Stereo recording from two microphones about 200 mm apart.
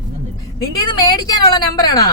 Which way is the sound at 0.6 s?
20° left (ahead or behind).